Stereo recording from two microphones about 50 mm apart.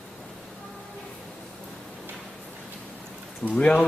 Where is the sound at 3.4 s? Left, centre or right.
Left.